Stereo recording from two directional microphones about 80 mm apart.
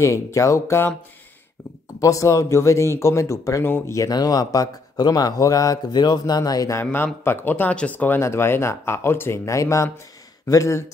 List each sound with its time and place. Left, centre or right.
0.0 s speech: left
2.0 s speech: left
3.6 s speech: left
3.9 s a man's voice: left
6.8 s speech: left
8.2 s speech: left